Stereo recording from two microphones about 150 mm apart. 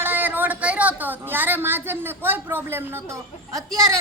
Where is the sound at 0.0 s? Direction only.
10° right (ahead or behind).